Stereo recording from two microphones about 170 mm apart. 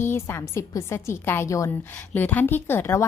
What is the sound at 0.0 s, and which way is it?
Speech, 15° left (ahead or behind).